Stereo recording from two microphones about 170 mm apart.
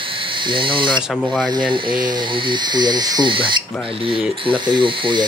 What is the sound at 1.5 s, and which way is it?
Speech, 25° right (ahead or behind).